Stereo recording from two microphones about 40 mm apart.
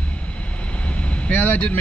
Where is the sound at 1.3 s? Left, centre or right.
Left.